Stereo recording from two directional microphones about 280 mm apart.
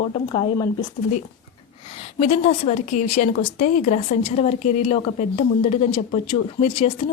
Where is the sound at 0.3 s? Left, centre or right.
Centre.